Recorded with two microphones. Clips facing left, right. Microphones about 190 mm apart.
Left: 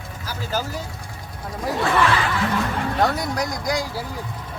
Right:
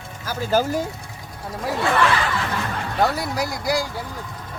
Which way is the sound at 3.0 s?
5° right (ahead or behind).